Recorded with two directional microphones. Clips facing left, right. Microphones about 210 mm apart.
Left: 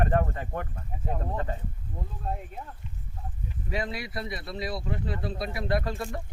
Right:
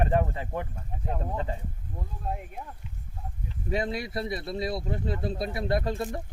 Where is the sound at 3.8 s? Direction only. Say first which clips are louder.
Right 2 dB; 25° right (ahead or behind).